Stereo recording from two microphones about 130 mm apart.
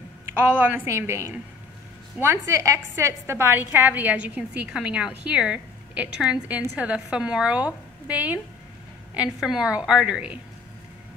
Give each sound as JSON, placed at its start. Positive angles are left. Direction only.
{"t": 0.3, "sound": "a woman's voice", "side_deg": -15}